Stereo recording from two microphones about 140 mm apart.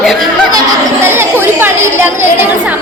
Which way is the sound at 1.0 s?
15° right (ahead or behind).